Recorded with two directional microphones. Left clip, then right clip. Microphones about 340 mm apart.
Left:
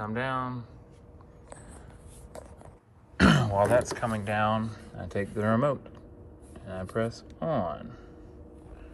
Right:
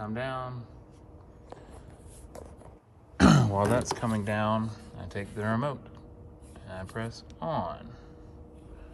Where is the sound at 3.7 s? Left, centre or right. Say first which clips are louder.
Left 4 dB; centre.